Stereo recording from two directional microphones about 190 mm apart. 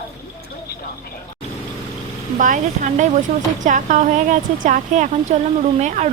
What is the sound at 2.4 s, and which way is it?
A woman's voice, 45° right (ahead or behind).